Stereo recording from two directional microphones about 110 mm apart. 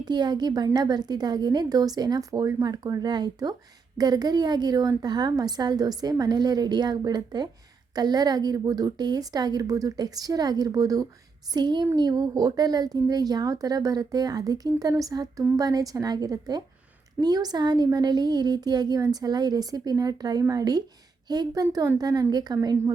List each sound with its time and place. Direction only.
0.0 s a woman's voice: 40° right (ahead or behind)